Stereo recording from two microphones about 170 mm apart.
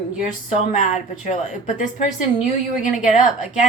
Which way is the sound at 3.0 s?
45° left (ahead or behind).